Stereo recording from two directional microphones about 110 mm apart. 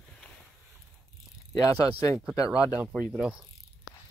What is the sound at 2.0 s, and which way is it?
Speech, 30° left (ahead or behind).